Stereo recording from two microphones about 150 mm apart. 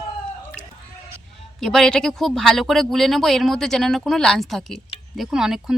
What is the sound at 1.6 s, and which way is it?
Speech, 5° left (ahead or behind).